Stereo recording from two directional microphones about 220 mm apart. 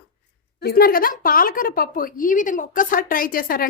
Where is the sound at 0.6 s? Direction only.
45° left (ahead or behind).